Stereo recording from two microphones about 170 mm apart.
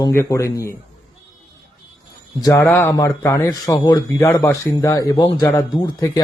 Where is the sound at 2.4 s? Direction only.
15° left (ahead or behind).